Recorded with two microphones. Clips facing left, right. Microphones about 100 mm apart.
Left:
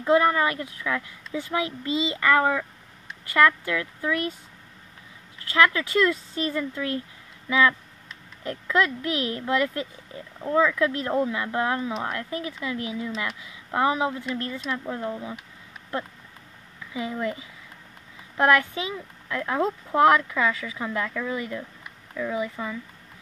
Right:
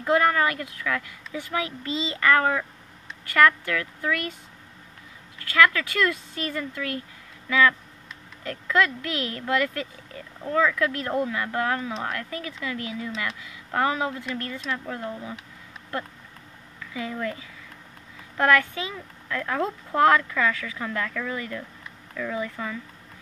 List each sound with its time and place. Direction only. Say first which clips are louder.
0.0 s speech: left 1 dB; 20° left (ahead or behind)
5.4 s speech: even; 25° left (ahead or behind)
16.8 s speech: left 2 dB; 20° left (ahead or behind)